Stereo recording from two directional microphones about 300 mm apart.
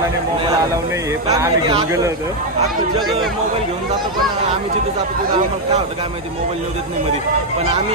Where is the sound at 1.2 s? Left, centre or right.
Centre.